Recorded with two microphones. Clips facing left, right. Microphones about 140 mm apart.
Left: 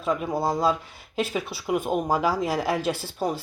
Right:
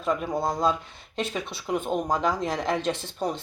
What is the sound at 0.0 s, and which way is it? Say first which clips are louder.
Speech: left 1 dB; centre (ahead or behind).